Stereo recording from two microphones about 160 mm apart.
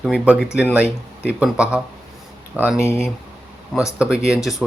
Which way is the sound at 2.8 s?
15° left (ahead or behind).